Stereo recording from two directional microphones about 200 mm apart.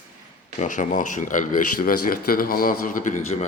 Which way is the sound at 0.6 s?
40° left (ahead or behind).